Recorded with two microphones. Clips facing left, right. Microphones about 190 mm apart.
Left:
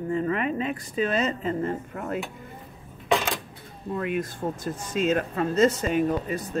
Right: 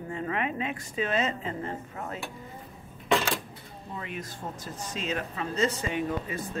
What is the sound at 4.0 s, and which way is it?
Speech, 55° left (ahead or behind).